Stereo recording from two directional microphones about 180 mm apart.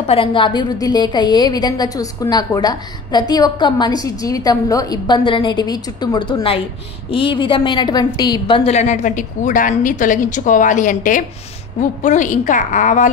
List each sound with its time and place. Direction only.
0.0 s a woman's voice: 30° left (ahead or behind)